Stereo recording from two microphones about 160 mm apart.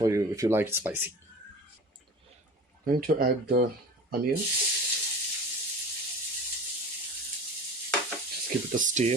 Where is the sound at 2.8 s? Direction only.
65° right (ahead or behind).